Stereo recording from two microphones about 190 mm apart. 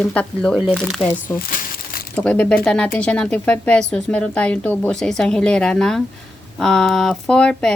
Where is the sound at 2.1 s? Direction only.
5° left (ahead or behind).